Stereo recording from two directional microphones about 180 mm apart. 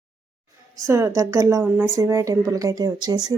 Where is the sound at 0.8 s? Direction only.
15° right (ahead or behind).